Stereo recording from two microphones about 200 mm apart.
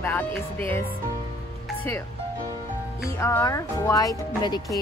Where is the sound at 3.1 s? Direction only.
15° left (ahead or behind).